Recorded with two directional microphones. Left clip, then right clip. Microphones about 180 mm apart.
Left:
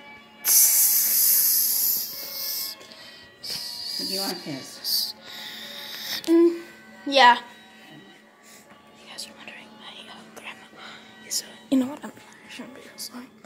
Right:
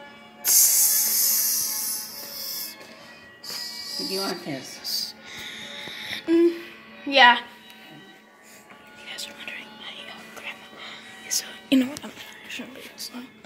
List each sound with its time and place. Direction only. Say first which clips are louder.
0.4 s a sound: right 1 dB; centre (ahead or behind)
2.2 s music: left 2 dB; 20° left (ahead or behind)
3.4 s music: left 2 dB; 5° right (ahead or behind); by 6.5 s 15° left (ahead or behind)
7.1 s a woman's voice: even; 10° left (ahead or behind)
9.0 s whispering: right 4 dB; centre (ahead or behind)